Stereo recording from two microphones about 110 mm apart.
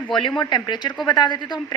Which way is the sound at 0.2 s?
45° left (ahead or behind).